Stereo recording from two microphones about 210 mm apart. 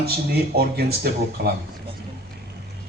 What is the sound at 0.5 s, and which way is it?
A man's voice, 50° right (ahead or behind).